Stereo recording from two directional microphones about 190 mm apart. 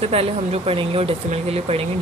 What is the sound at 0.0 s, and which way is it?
Speech, 30° right (ahead or behind).